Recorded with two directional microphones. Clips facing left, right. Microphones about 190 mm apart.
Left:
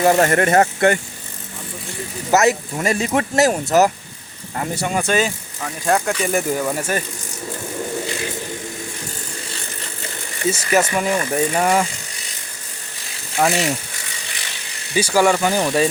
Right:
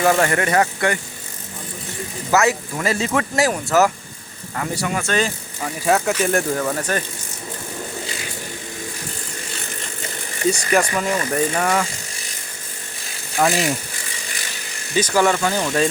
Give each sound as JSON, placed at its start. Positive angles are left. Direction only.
{"t": 0.2, "sound": "speech", "side_deg": 40}
{"t": 2.4, "sound": "speech", "side_deg": 20}
{"t": 5.6, "sound": "speech", "side_deg": -5}
{"t": 6.5, "sound": "speech", "side_deg": 10}
{"t": 10.4, "sound": "speech", "side_deg": 5}
{"t": 10.8, "sound": "speech", "side_deg": 25}
{"t": 13.4, "sound": "speech", "side_deg": 0}
{"t": 14.9, "sound": "speech", "side_deg": 10}